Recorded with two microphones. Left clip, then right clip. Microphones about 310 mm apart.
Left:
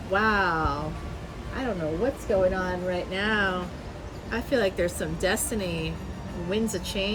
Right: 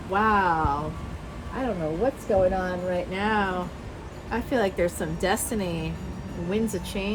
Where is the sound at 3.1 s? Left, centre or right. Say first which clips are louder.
Left 1 dB; centre.